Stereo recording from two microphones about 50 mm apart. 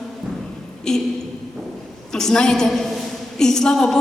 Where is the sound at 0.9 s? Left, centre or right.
Centre.